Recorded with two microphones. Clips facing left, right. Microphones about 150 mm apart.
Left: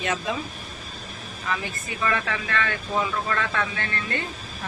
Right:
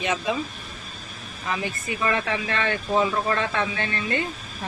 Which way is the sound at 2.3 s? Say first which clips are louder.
Right 2 dB; 25° right (ahead or behind).